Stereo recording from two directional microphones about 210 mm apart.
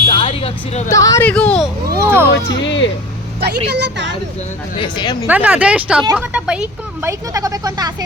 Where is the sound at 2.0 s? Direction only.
10° right (ahead or behind).